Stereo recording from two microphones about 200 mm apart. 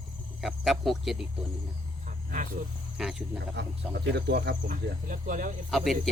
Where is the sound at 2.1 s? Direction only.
40° right (ahead or behind).